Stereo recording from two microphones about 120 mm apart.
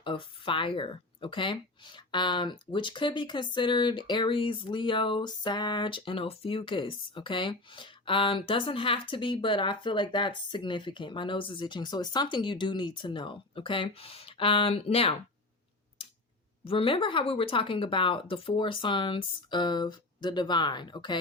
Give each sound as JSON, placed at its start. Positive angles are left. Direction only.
{"t": 0.0, "sound": "speech", "side_deg": 45}
{"t": 16.6, "sound": "speech", "side_deg": 50}